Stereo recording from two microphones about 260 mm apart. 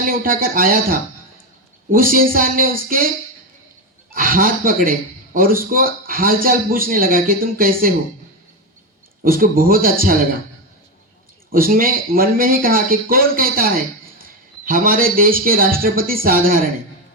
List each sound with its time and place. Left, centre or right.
0.0 s a man's voice: right
4.1 s a man's voice: right
9.2 s a man's voice: right
11.5 s a man's voice: right